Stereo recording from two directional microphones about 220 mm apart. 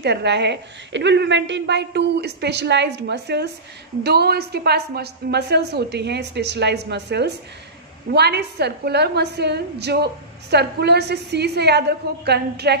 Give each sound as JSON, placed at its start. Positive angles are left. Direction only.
{"t": 0.0, "sound": "a woman's voice", "side_deg": -50}